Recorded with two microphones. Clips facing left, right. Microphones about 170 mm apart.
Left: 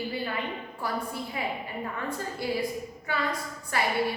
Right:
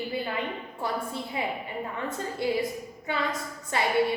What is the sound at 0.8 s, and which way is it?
A woman's voice, 25° right (ahead or behind).